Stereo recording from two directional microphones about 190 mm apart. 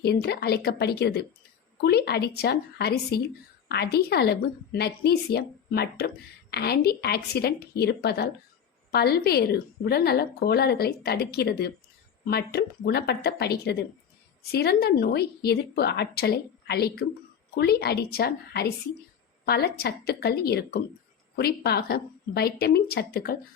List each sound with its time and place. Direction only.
0.0 s a woman's voice: 60° left (ahead or behind)